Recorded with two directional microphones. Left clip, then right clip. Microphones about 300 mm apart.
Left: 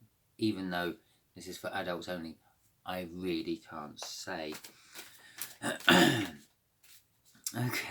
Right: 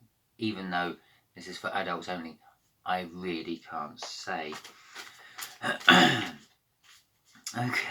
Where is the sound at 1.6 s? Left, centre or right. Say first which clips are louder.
Right 5 dB; left.